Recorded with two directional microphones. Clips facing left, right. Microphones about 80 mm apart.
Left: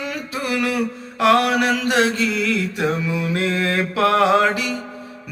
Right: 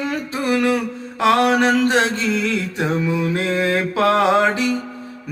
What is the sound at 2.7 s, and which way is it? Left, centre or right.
Mantra, right.